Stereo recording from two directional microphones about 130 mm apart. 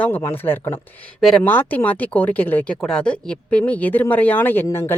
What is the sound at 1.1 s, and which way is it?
Speech, centre (ahead or behind).